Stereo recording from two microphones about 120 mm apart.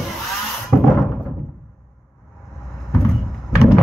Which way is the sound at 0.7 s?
Centre (ahead or behind).